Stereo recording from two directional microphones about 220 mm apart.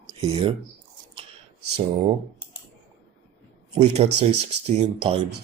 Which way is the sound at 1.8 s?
30° right (ahead or behind).